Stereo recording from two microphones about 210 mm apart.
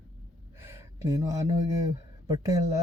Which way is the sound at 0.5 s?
10° right (ahead or behind).